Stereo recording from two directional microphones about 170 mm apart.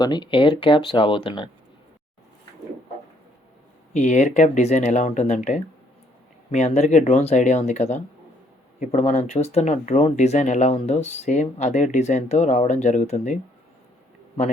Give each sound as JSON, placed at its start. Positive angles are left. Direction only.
{"t": 0.0, "sound": "speech", "side_deg": 25}
{"t": 3.9, "sound": "speech", "side_deg": 45}